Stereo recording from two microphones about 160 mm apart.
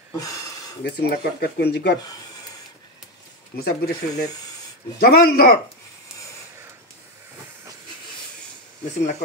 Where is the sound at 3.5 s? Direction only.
80° left.